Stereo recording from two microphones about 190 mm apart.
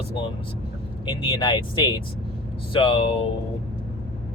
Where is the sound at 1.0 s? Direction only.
25° left (ahead or behind).